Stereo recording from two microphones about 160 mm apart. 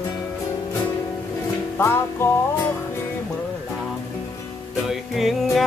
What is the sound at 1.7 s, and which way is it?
Music, 15° left (ahead or behind).